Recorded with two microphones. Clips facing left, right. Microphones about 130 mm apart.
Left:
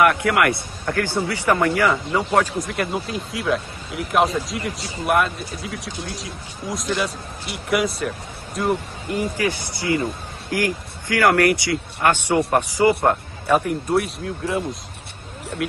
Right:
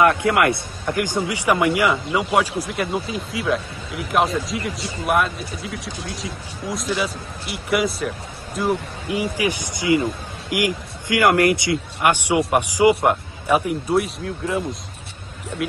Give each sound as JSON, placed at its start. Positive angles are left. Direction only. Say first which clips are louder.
{"t": 0.0, "sound": "speech", "louder": "right 1 dB", "side_deg": -25}
{"t": 9.1, "sound": "speech", "louder": "even", "side_deg": -10}